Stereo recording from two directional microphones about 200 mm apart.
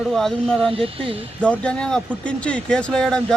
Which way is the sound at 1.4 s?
5° left (ahead or behind).